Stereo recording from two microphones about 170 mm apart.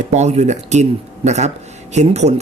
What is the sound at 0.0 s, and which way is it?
Speech, 40° right (ahead or behind).